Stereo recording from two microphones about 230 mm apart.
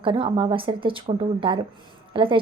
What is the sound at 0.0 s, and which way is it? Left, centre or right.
A woman's voice, right.